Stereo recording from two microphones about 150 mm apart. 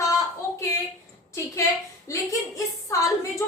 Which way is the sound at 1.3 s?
20° left (ahead or behind).